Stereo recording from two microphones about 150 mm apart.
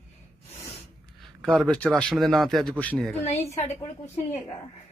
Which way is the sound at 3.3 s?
45° left (ahead or behind).